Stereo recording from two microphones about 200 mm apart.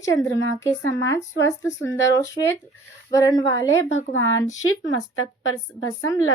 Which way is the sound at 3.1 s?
20° left (ahead or behind).